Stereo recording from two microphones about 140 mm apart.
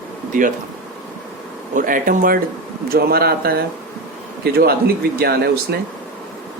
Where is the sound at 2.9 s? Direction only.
90° right.